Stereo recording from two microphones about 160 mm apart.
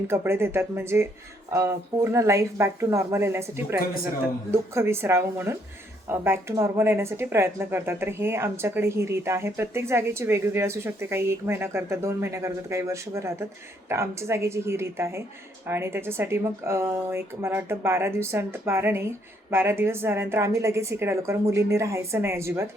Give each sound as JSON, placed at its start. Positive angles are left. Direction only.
{"t": 0.1, "sound": "speech", "side_deg": -15}